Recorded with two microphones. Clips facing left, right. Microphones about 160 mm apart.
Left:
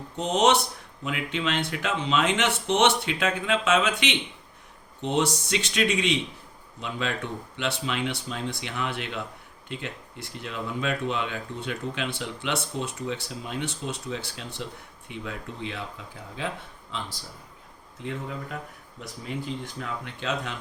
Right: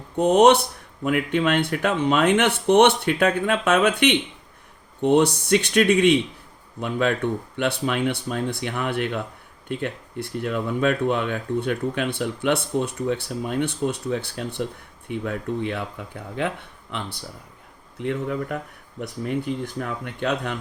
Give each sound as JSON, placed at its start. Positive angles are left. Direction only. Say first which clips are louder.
{"t": 0.2, "sound": "speech", "louder": "right 7 dB", "side_deg": -55}